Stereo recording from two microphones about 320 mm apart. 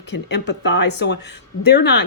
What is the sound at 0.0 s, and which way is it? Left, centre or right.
A woman's voice, left.